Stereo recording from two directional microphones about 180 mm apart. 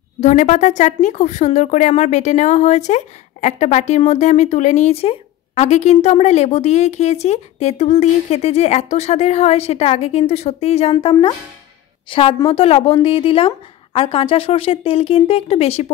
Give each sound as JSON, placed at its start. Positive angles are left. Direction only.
{"t": 0.2, "sound": "speech", "side_deg": 40}